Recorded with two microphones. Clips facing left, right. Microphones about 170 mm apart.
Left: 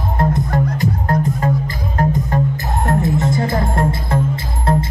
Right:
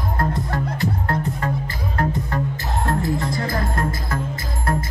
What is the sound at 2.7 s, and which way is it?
Music, 20° left (ahead or behind).